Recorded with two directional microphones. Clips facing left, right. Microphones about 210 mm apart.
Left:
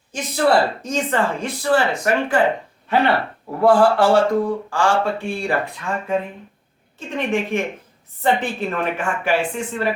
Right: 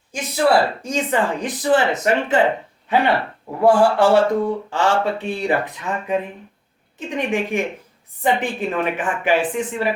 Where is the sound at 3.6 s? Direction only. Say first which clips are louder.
Even; 20° right (ahead or behind).